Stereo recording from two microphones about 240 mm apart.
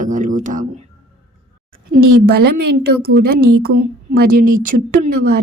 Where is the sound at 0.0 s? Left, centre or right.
Right.